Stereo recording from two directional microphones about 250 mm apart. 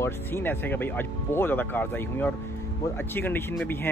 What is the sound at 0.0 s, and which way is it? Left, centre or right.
Speech, centre.